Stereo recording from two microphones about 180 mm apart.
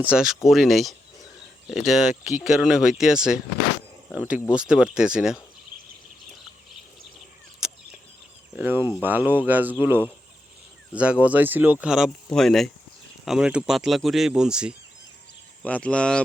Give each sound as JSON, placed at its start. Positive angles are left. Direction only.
{"t": 0.0, "sound": "speech", "side_deg": -5}
{"t": 5.7, "sound": "a sound", "side_deg": -50}
{"t": 8.5, "sound": "speech", "side_deg": -10}
{"t": 10.9, "sound": "speech", "side_deg": -5}
{"t": 15.6, "sound": "speech", "side_deg": 5}